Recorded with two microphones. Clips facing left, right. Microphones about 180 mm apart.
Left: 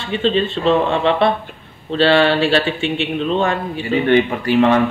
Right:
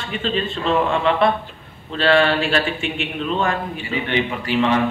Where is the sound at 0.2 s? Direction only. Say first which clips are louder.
Left 6 dB; 30° left (ahead or behind).